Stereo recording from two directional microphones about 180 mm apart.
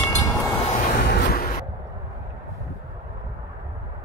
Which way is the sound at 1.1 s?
55° left (ahead or behind).